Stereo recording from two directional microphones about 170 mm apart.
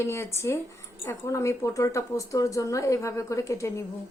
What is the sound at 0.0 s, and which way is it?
A woman's voice, 15° left (ahead or behind).